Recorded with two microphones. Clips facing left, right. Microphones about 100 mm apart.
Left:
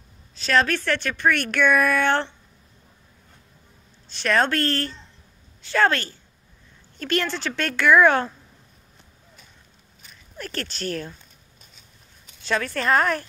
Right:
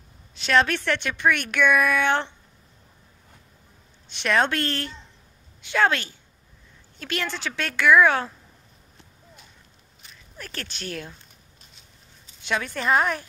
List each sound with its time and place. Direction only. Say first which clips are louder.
0.5 s speech: even; 20° right (ahead or behind)
4.1 s a woman's voice: left 1 dB; 15° right (ahead or behind)
10.3 s speech: left 5 dB; 5° right (ahead or behind)
12.4 s speech: left 2 dB; 10° right (ahead or behind)